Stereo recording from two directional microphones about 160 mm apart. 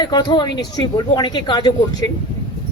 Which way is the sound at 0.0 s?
25° left (ahead or behind).